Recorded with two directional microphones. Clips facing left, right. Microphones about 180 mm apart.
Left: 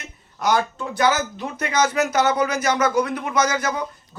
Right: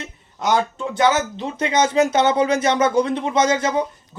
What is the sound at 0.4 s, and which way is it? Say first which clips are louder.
Speech: right 1 dB; 20° right (ahead or behind).